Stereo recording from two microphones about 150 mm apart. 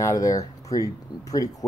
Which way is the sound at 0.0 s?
20° left (ahead or behind).